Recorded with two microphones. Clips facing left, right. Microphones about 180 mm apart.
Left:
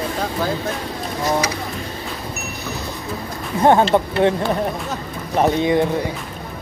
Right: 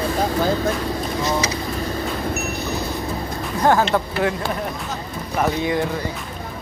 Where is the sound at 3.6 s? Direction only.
30° left (ahead or behind).